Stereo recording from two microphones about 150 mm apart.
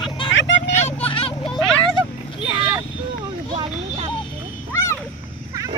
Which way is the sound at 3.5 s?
40° right (ahead or behind).